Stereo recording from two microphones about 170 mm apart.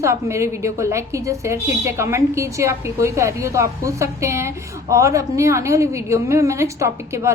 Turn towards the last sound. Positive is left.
turn(degrees=-15)  # may be behind; listen again after turning